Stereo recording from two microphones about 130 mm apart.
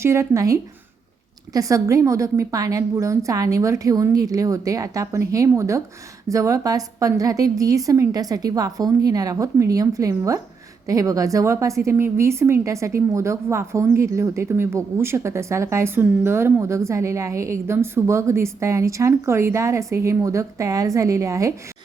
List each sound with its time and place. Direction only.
0.0 s a woman's voice: 20° right (ahead or behind)